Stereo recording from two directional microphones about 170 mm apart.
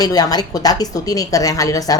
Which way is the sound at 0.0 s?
20° left (ahead or behind).